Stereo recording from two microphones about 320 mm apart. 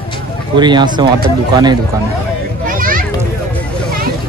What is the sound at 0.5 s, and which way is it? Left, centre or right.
Speech, centre.